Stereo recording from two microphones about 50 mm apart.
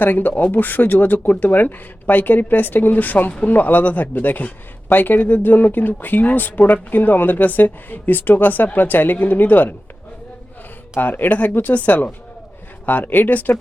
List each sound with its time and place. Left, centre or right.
0.0 s speech: left
11.0 s speech: left